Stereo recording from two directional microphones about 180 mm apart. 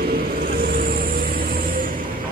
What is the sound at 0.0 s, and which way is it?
Vehicle, 55° right (ahead or behind).